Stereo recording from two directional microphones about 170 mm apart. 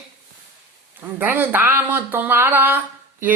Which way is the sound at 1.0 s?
10° right (ahead or behind).